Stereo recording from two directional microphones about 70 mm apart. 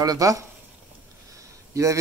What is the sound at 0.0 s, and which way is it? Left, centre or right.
Speech, right.